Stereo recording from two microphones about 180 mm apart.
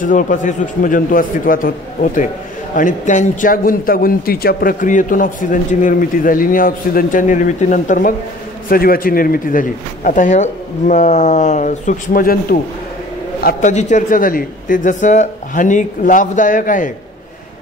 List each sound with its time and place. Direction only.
0.0 s a man's voice: 45° left (ahead or behind)
2.7 s a man's voice: 45° left (ahead or behind)